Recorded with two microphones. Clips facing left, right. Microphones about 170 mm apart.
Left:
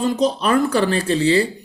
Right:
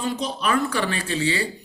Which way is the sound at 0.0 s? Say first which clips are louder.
Left 7 dB; 40° left (ahead or behind).